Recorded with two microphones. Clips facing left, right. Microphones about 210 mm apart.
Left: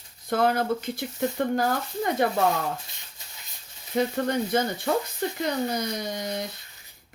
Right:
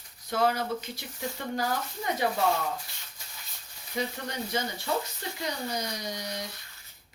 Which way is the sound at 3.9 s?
55° left (ahead or behind).